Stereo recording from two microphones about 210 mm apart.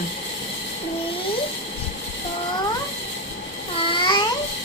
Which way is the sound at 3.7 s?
25° left (ahead or behind).